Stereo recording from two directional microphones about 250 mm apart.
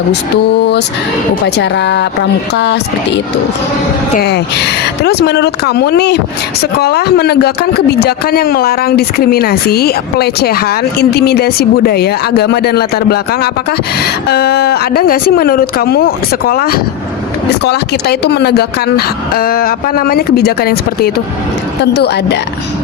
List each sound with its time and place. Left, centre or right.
1.5 s speech: left
4.1 s speech: left